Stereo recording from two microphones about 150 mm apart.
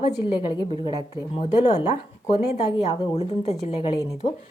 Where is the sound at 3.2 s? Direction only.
40° left (ahead or behind).